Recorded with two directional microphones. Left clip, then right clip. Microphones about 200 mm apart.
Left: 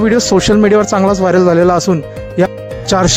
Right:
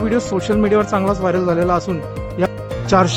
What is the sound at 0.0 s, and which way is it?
Speech, 35° left (ahead or behind).